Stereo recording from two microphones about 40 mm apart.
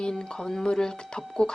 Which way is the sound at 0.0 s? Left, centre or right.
Centre.